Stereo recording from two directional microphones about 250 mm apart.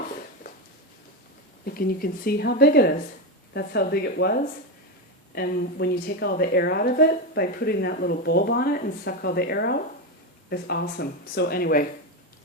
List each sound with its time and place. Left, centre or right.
1.6 s a woman's voice: left